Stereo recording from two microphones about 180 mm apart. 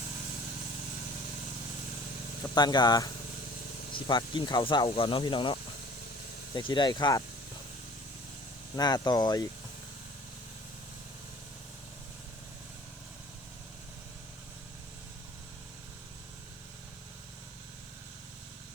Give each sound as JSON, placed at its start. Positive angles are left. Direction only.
{"t": 2.6, "sound": "speech", "side_deg": 25}
{"t": 8.7, "sound": "speech", "side_deg": 20}